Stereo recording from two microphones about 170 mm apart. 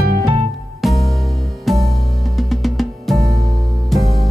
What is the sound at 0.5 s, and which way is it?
Music, centre (ahead or behind).